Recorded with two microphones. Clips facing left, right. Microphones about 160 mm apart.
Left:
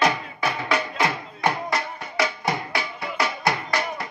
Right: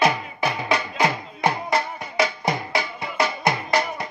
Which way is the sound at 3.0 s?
20° right (ahead or behind).